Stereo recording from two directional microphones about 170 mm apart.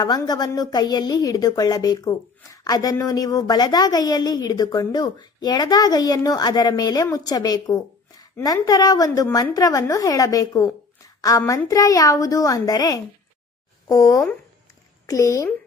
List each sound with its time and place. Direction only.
0.0 s a woman's voice: 25° left (ahead or behind)